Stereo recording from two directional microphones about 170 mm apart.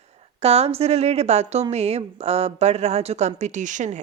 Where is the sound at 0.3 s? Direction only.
35° right (ahead or behind).